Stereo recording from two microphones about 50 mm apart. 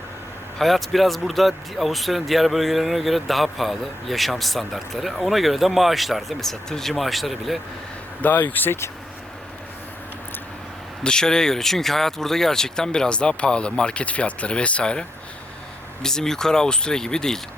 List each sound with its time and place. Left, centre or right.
0.6 s speech: centre
8.2 s speech: left
11.0 s speech: centre
16.0 s speech: centre